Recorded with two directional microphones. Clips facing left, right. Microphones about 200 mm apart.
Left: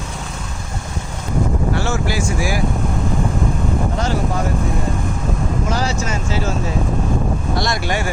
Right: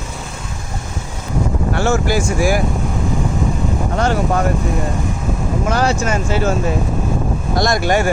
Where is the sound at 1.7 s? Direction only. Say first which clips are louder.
Right 4 dB; 50° right (ahead or behind).